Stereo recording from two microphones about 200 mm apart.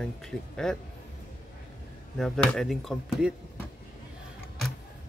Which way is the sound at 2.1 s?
Centre (ahead or behind).